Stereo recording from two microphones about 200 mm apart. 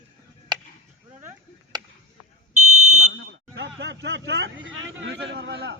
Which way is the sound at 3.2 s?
65° right (ahead or behind).